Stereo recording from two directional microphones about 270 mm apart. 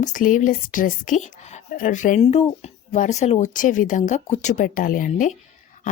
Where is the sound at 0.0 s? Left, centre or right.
Left.